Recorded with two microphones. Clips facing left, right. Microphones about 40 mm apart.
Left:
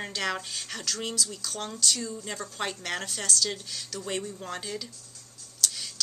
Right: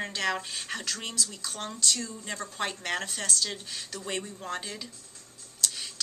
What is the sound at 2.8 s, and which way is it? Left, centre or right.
Speech, centre.